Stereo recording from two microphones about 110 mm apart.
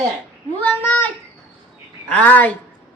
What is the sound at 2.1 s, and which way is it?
Speech, 15° left (ahead or behind).